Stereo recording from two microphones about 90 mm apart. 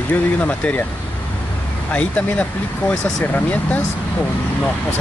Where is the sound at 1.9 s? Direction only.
15° left (ahead or behind).